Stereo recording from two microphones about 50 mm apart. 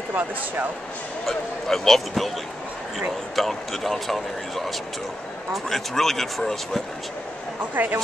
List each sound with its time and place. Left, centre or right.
1.2 s speech: centre
3.0 s speech: centre
3.4 s speech: centre
7.7 s speech: right